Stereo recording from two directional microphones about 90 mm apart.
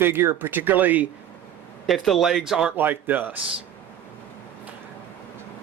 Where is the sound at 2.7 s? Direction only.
20° right (ahead or behind).